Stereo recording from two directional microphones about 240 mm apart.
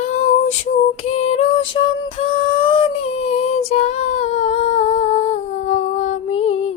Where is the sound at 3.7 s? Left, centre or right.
Left.